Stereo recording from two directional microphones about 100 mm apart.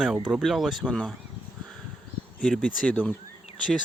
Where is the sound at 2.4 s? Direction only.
10° left (ahead or behind).